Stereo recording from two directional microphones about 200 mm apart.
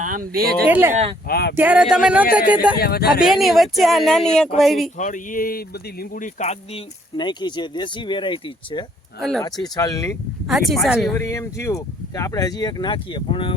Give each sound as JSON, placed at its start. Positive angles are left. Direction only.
{"t": 0.0, "sound": "speech", "side_deg": -45}
{"t": 0.7, "sound": "speech", "side_deg": -10}
{"t": 1.3, "sound": "speech", "side_deg": 55}
{"t": 1.5, "sound": "speech", "side_deg": -5}
{"t": 2.7, "sound": "speech", "side_deg": 50}
{"t": 3.2, "sound": "speech", "side_deg": 0}
{"t": 4.9, "sound": "speech", "side_deg": 40}
{"t": 10.5, "sound": "speech", "side_deg": 0}
{"t": 11.1, "sound": "speech", "side_deg": 15}